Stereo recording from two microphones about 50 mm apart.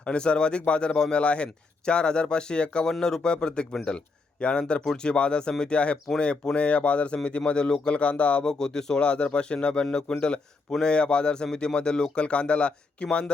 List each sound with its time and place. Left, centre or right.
0.0 s speech: left
8.4 s speech: centre